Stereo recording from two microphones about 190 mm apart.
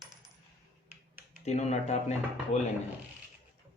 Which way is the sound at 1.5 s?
35° left (ahead or behind).